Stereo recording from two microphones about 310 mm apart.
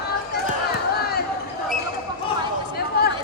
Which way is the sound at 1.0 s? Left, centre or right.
Left.